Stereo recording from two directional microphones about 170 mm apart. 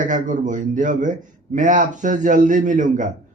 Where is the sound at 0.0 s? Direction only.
50° right (ahead or behind).